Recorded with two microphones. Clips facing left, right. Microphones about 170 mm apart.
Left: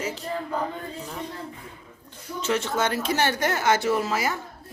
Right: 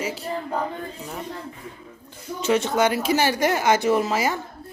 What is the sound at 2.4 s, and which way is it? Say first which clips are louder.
Speech: right 5 dB; 15° right (ahead or behind).